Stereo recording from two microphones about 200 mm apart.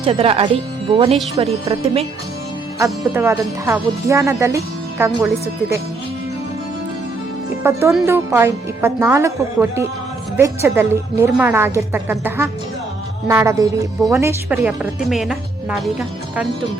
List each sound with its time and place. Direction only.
0.0 s speech: 30° right (ahead or behind)
2.7 s speech: 15° right (ahead or behind)
7.6 s speech: 15° right (ahead or behind)